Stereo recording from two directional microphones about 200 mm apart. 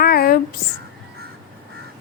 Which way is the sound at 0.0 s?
50° left (ahead or behind).